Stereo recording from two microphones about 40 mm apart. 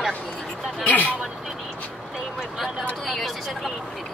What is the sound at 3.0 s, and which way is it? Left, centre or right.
Speech, centre.